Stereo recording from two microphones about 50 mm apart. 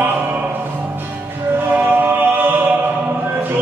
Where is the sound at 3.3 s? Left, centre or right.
Right.